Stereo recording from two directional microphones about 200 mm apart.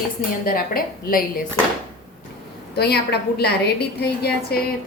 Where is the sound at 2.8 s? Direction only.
55° left (ahead or behind).